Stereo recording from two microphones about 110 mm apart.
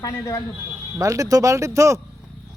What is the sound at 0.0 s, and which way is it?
Speech, 35° left (ahead or behind).